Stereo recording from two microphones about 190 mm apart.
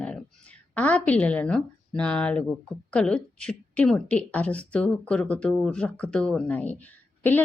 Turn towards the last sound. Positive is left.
turn(degrees=10)  # may be behind; listen again after turning